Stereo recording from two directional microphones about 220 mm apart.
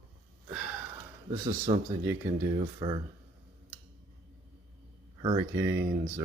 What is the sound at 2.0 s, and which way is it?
Speech, 15° right (ahead or behind).